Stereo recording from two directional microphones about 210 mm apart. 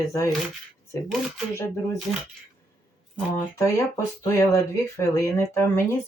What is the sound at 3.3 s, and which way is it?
Speech, 15° left (ahead or behind).